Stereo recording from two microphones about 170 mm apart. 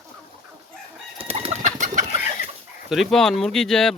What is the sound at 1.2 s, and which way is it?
Pigeon, 35° right (ahead or behind).